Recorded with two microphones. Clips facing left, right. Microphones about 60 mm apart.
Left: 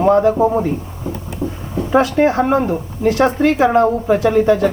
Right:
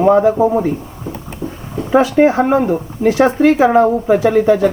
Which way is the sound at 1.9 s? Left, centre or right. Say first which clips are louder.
Right 3 dB; centre.